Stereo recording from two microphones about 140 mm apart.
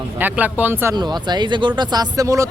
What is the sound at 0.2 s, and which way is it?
Speech, 15° right (ahead or behind).